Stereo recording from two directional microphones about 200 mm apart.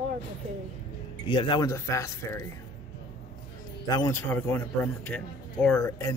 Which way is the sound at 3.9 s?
15° left (ahead or behind).